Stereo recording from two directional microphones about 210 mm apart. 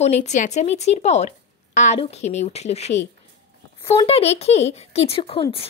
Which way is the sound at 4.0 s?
30° left (ahead or behind).